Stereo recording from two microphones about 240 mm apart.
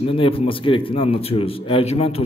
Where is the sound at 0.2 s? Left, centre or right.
Left.